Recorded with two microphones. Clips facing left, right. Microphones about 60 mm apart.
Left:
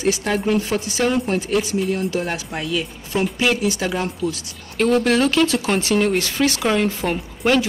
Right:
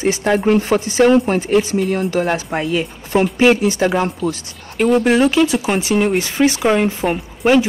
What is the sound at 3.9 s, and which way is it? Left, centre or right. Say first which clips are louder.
Speech: right 5 dB; right.